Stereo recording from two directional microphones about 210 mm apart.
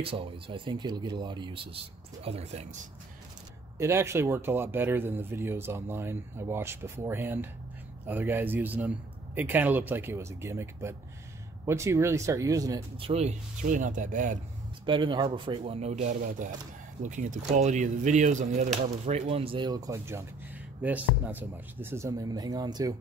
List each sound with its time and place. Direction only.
0.0 s speech: 25° right (ahead or behind)
3.7 s speech: 15° right (ahead or behind)
13.1 s speech: 35° right (ahead or behind)
14.9 s speech: 25° right (ahead or behind)